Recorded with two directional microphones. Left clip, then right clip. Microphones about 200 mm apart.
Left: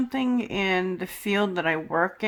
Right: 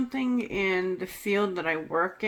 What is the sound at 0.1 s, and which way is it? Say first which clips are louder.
Speech: left 3 dB; 35° left (ahead or behind).